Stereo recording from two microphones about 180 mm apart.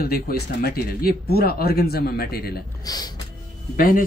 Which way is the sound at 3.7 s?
50° left (ahead or behind).